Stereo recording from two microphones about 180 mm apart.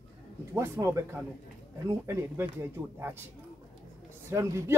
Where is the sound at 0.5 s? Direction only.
15° right (ahead or behind).